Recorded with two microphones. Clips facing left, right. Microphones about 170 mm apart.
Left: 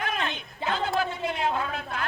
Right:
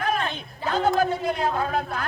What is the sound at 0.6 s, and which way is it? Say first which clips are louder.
A man's voice: right 5 dB; 40° right (ahead or behind).